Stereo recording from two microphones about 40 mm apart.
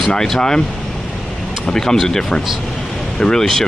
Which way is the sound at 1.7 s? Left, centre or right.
Centre.